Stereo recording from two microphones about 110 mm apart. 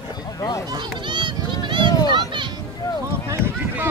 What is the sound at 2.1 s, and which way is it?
Children playing, 45° right (ahead or behind).